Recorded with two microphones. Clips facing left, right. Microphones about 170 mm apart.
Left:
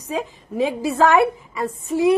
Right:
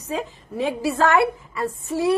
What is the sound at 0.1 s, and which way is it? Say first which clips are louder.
A woman's voice: left 2 dB; 15° left (ahead or behind).